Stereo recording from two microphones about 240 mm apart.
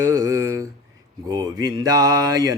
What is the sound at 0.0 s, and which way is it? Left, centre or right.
Mantra, centre.